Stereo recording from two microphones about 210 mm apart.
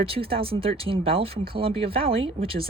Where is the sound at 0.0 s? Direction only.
25° right (ahead or behind).